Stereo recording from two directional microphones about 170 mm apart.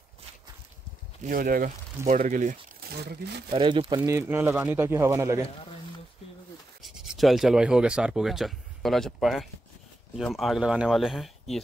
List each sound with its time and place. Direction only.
1.2 s speech: 55° right (ahead or behind)
3.0 s speech: 75° right (ahead or behind)
3.5 s speech: 30° right (ahead or behind)
6.8 s rub: centre (ahead or behind)
10.1 s speech: centre (ahead or behind)